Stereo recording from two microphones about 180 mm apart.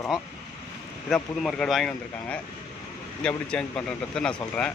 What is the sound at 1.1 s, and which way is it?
Speech, 5° left (ahead or behind).